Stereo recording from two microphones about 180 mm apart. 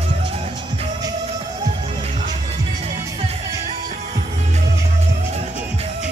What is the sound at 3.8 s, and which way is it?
Music, 40° right (ahead or behind).